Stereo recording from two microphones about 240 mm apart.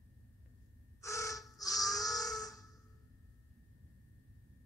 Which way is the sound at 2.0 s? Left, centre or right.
Centre.